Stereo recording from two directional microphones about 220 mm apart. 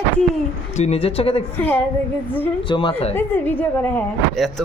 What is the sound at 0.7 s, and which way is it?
Speech, 30° left (ahead or behind).